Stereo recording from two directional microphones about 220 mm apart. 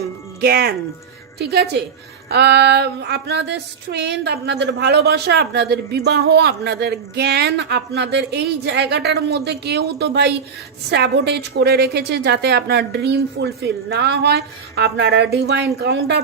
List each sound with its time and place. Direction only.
0.4 s female singing: 45° right (ahead or behind)